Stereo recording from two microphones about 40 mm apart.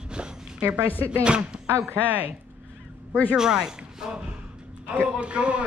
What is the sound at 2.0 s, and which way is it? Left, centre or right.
Speech, right.